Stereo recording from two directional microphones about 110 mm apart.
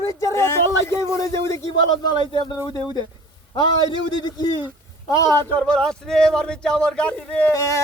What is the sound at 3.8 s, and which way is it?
Speech, 40° left (ahead or behind).